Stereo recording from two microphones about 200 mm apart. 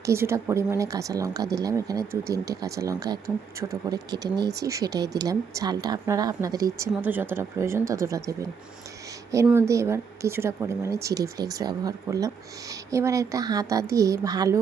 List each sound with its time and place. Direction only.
0.0 s speech: 15° right (ahead or behind)